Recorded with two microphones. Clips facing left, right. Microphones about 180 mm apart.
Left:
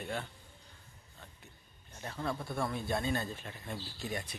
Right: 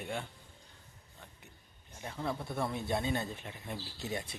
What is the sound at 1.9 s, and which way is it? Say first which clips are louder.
Speech: even; 10° right (ahead or behind).